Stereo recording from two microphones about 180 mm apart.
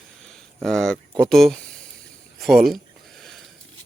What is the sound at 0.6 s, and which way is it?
Speech, centre (ahead or behind).